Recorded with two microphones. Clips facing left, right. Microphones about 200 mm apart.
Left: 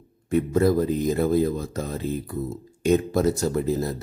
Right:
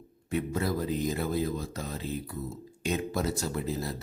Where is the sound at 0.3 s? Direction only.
45° left (ahead or behind).